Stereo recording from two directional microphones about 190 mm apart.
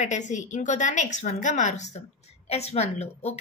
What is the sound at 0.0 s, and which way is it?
A woman's voice, 40° left (ahead or behind).